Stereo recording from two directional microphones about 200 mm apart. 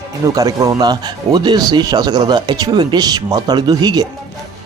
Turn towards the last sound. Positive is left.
turn(degrees=-20)  # may be behind; listen again after turning